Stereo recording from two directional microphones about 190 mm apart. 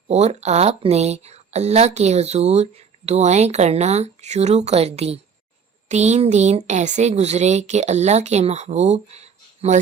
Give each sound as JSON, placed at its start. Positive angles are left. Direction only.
{"t": 0.1, "sound": "speech", "side_deg": -35}